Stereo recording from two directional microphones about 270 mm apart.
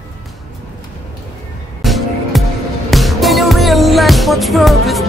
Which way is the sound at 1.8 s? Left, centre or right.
Centre.